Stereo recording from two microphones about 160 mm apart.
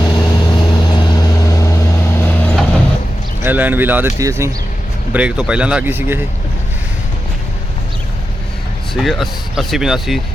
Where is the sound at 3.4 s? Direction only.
10° right (ahead or behind).